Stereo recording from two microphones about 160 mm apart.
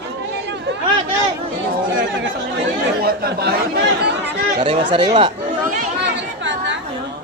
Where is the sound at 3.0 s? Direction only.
75° right (ahead or behind).